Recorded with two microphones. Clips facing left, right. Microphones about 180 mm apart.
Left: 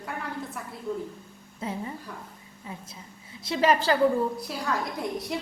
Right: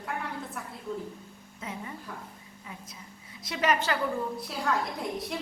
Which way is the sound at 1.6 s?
30° left (ahead or behind).